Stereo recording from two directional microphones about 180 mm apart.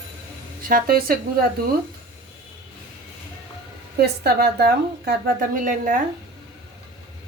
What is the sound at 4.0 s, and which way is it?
A woman's voice, 60° right (ahead or behind).